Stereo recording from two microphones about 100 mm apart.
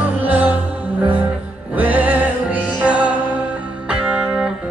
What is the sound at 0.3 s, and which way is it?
Music, 15° right (ahead or behind).